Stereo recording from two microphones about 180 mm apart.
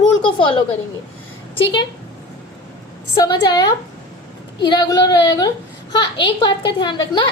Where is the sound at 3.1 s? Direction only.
25° left (ahead or behind).